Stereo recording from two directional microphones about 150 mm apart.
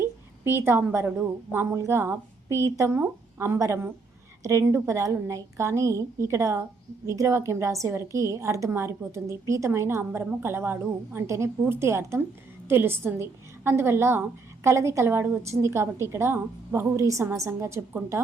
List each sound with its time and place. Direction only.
0.0 s a woman's voice: 15° right (ahead or behind)